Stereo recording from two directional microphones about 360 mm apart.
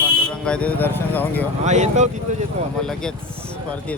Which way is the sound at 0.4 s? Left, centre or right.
Centre.